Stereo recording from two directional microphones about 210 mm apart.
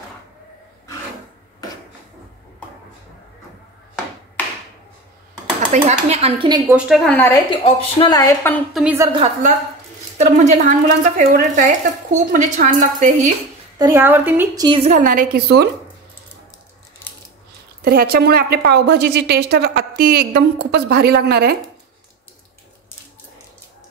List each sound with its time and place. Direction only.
5.6 s a woman's voice: 35° right (ahead or behind)
6.7 s a woman's voice: centre (ahead or behind)
7.2 s a woman's voice: 10° left (ahead or behind)
7.5 s a woman's voice: 25° left (ahead or behind)
8.7 s a woman's voice: 10° right (ahead or behind)
9.1 s a woman's voice: 30° right (ahead or behind)
13.7 s a woman's voice: 15° right (ahead or behind); by 15.7 s 50° right (ahead or behind)
17.8 s a woman's voice: 45° right (ahead or behind)